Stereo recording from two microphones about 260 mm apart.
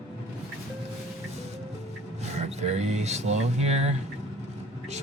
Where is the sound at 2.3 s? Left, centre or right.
Right.